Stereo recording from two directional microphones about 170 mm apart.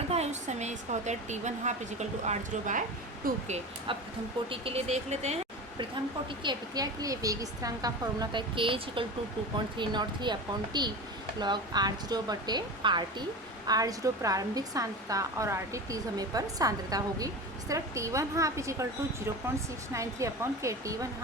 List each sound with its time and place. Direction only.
0.1 s a woman's voice: 40° right (ahead or behind)
6.4 s a woman's voice: 25° right (ahead or behind)